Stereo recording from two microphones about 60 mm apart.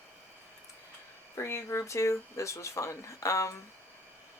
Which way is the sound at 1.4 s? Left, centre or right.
Left.